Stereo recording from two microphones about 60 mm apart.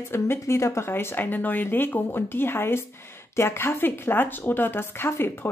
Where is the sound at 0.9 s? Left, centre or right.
Left.